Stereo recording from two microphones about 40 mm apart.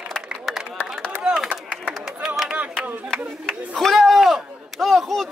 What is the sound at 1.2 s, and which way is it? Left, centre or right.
Chop, centre.